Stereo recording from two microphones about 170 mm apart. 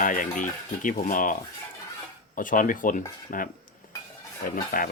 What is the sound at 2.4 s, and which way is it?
Speech, 50° left (ahead or behind).